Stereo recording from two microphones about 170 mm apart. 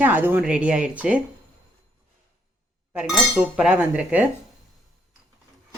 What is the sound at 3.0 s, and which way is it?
A woman's voice, centre (ahead or behind).